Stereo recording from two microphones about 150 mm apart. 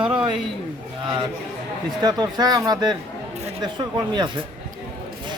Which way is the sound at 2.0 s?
25° right (ahead or behind).